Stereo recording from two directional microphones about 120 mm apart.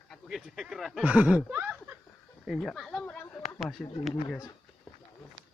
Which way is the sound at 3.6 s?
Centre (ahead or behind).